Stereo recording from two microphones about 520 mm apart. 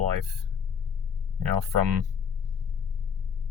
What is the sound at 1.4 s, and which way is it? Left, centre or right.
Speech, right.